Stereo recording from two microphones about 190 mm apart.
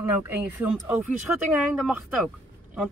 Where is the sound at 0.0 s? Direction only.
10° right (ahead or behind).